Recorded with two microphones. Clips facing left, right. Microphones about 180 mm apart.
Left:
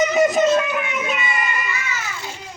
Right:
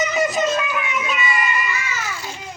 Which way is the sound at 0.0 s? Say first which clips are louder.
Left 4 dB; 50° left (ahead or behind).